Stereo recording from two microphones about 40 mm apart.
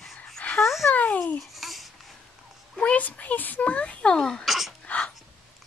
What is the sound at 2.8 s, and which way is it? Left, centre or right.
A child's voice, left.